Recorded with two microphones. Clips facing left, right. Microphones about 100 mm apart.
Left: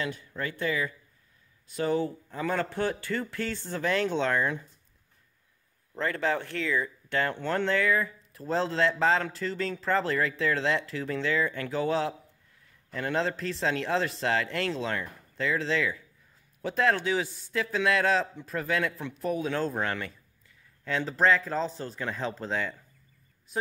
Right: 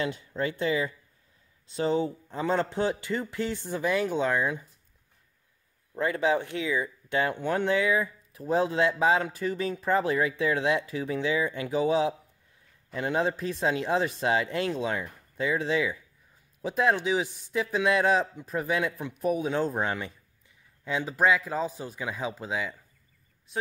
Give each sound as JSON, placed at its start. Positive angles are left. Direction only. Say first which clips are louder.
{"t": 0.0, "sound": "a man's voice", "louder": "right 4 dB", "side_deg": -25}
{"t": 5.9, "sound": "a man's voice", "louder": "right 3 dB", "side_deg": -15}